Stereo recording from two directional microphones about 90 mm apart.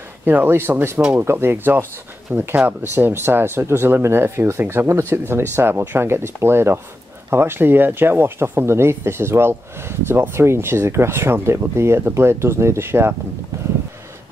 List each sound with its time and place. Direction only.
0.2 s speech: 20° right (ahead or behind)